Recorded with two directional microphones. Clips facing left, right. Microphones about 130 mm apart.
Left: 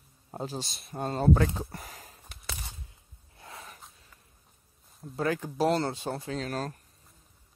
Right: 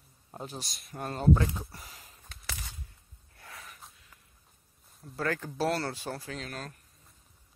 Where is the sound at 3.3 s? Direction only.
25° left (ahead or behind).